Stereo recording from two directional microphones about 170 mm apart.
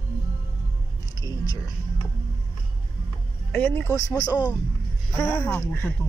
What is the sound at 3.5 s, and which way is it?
Speech, 10° left (ahead or behind).